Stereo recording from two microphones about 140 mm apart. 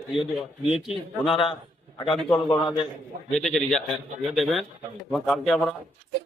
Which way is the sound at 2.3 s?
30° left (ahead or behind).